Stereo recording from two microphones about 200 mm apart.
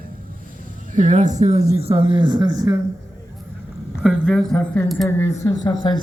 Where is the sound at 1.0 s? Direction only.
40° right (ahead or behind); by 2.7 s 20° right (ahead or behind).